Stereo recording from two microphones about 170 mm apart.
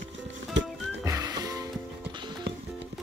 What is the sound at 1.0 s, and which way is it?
Music, 20° right (ahead or behind).